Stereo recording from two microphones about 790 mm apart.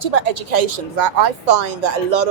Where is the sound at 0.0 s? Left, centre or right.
Right.